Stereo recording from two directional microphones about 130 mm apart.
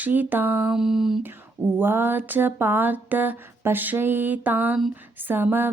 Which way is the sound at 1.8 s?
15° right (ahead or behind).